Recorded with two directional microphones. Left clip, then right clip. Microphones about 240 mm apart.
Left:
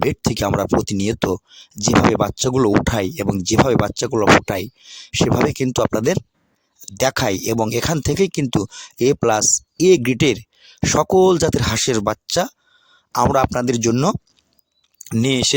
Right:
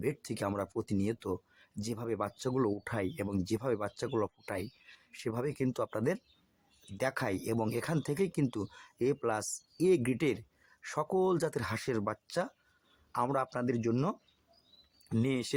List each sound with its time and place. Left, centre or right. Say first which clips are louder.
0.0 s speech: left 16 dB; left